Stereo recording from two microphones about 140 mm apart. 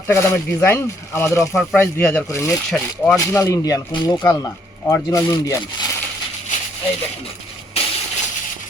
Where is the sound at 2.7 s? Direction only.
5° left (ahead or behind).